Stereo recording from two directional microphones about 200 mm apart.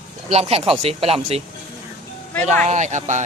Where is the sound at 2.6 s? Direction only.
35° right (ahead or behind).